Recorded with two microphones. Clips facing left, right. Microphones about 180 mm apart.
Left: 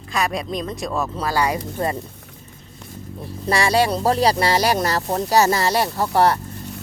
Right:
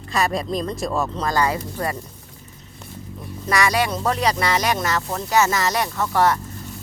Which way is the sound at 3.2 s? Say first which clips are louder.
Left 1 dB; 30° left (ahead or behind).